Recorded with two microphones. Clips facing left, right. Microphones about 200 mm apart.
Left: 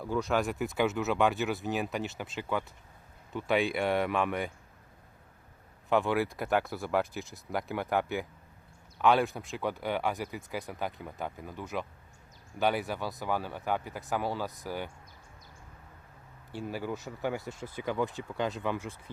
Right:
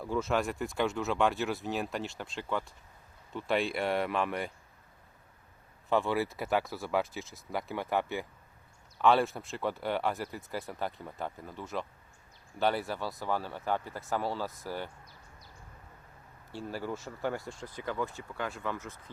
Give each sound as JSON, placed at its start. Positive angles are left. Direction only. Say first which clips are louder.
{"t": 0.0, "sound": "speech", "louder": "left 1 dB", "side_deg": 0}
{"t": 5.9, "sound": "speech", "louder": "left 2 dB", "side_deg": 0}
{"t": 12.5, "sound": "speech", "louder": "left 1 dB", "side_deg": 15}
{"t": 16.6, "sound": "speech", "louder": "left 1 dB", "side_deg": 5}